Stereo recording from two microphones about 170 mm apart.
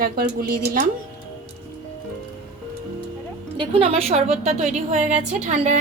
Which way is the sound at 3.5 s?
30° right (ahead or behind).